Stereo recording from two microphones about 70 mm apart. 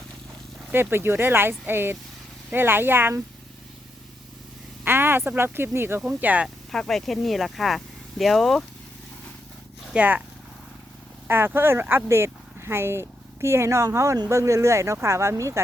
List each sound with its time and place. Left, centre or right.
0.7 s speech: right
4.9 s a sound: right
5.4 s speech: right
6.1 s speech: right
6.7 s speech: centre
9.9 s speech: right
11.3 s speech: right